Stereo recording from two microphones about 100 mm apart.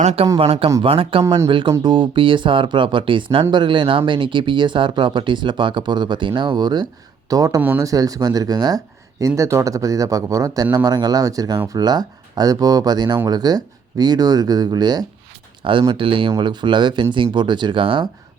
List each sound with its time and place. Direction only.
0.3 s a man's voice: 70° right (ahead or behind); by 15.0 s 45° right (ahead or behind)
15.6 s speech: 60° right (ahead or behind)